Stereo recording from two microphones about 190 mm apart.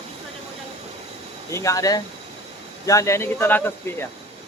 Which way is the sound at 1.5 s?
15° left (ahead or behind).